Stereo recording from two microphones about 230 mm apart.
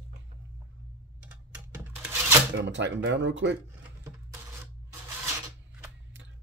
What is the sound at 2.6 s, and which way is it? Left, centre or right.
Speech, right.